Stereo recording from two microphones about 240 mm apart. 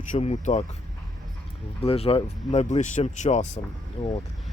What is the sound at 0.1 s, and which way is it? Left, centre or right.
Speech, left.